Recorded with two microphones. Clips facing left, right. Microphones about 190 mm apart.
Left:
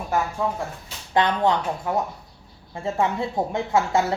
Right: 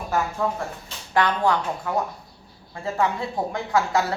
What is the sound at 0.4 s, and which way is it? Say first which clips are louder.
Speech: even; 10° left (ahead or behind).